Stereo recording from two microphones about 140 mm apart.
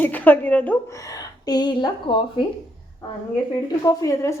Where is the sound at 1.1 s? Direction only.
30° left (ahead or behind).